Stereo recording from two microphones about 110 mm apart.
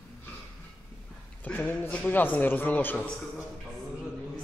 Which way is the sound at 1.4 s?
15° left (ahead or behind).